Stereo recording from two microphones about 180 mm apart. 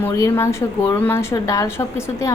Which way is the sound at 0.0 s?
15° left (ahead or behind).